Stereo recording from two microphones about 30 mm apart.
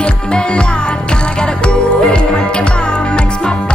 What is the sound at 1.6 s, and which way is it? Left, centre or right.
Music, left.